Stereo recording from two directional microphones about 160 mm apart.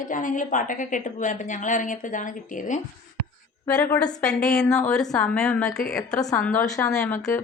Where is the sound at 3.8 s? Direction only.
10° left (ahead or behind).